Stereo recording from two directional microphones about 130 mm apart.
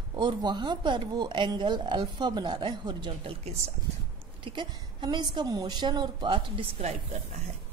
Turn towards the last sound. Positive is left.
turn(degrees=-60)  # may be behind; listen again after turning